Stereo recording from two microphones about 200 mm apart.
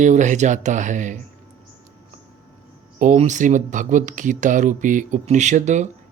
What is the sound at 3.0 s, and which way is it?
Speech, 35° right (ahead or behind).